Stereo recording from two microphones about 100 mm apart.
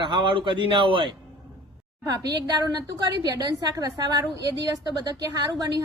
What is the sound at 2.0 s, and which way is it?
A woman's voice, 40° right (ahead or behind).